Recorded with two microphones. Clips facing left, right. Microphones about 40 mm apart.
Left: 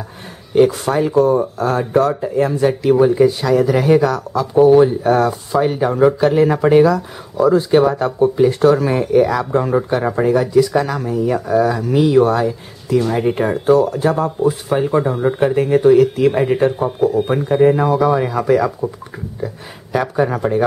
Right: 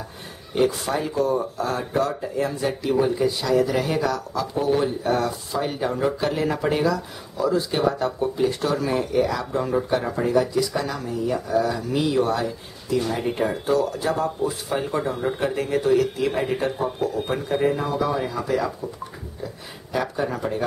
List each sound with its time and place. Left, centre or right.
0.6 s speech: left
3.7 s speech: left
11.7 s speech: left
17.9 s speech: left
19.9 s speech: left